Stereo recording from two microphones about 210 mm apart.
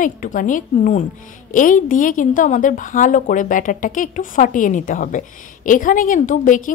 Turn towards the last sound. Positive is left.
turn(degrees=40)  # may be behind; listen again after turning